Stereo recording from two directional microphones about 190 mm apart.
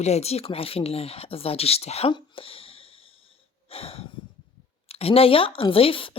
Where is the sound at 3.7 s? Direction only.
30° left (ahead or behind).